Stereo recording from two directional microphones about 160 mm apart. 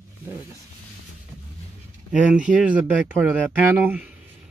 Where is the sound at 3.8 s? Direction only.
10° right (ahead or behind).